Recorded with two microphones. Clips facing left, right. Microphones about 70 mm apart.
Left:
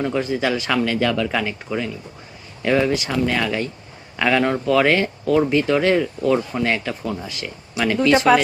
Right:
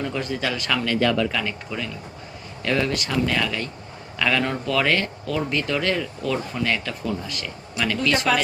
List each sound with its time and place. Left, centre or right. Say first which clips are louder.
0.0 s speech: left 5 dB; centre